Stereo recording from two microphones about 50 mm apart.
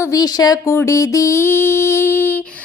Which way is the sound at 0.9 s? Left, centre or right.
Left.